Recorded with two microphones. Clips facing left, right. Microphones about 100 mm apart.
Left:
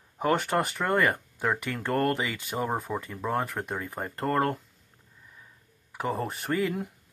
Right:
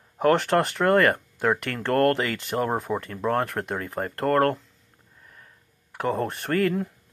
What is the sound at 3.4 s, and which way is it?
Speech, 60° right (ahead or behind).